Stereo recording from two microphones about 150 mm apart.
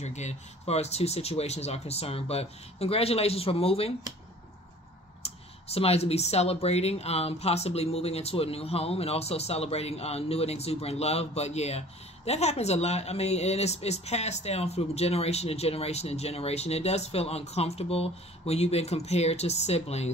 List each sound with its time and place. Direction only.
0.0 s speech: 50° left (ahead or behind)
5.2 s speech: 45° left (ahead or behind)